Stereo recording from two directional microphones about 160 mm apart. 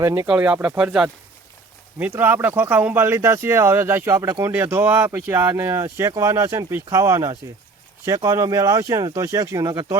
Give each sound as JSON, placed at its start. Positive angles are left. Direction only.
{"t": 0.0, "sound": "speech", "side_deg": -20}
{"t": 0.3, "sound": "speech", "side_deg": -5}